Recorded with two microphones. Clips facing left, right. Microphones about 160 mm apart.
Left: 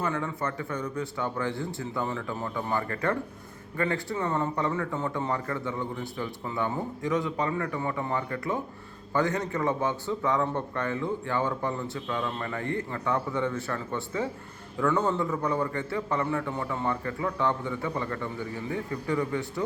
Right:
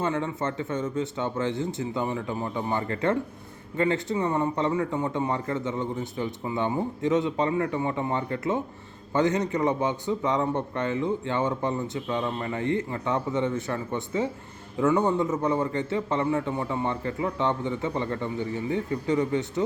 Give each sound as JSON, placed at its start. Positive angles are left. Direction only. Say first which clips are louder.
{"t": 0.0, "sound": "a man's voice", "louder": "right 3 dB", "side_deg": -25}